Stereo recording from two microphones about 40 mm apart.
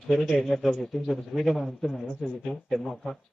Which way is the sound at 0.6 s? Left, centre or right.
Centre.